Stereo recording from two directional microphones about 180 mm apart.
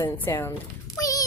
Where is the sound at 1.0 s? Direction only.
20° left (ahead or behind).